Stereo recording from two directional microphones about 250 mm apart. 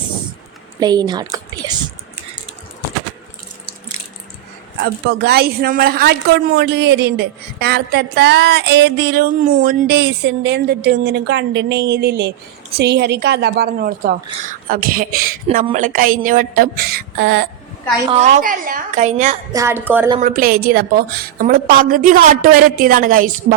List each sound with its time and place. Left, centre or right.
0.8 s a woman's voice: centre
4.8 s a woman's voice: right
18.0 s a woman's voice: right
19.5 s speech: centre
20.2 s a woman's voice: right